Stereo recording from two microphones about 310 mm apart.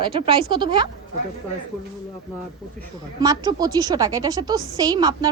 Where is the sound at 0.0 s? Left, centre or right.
Centre.